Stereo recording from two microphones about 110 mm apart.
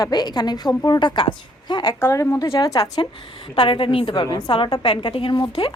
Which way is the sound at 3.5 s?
50° left (ahead or behind).